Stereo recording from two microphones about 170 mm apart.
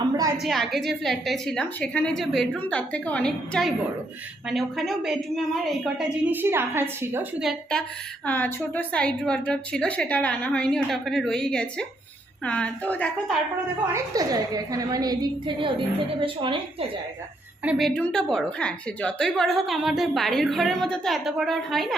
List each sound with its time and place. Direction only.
0.4 s a woman's voice: centre (ahead or behind)
13.8 s a woman's voice: 20° right (ahead or behind)
17.6 s a woman's voice: 5° right (ahead or behind)